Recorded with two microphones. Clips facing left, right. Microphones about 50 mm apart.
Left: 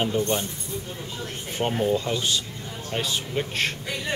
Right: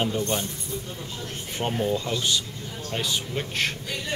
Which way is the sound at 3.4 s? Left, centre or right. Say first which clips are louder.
Left 3 dB; centre.